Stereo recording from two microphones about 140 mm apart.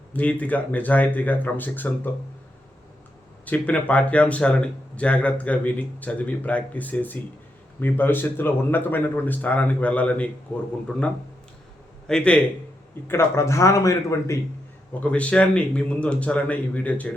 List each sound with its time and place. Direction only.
0.1 s speech: 10° left (ahead or behind)
3.4 s speech: 10° left (ahead or behind)
13.1 s speech: 20° left (ahead or behind)
15.0 s speech: 10° left (ahead or behind)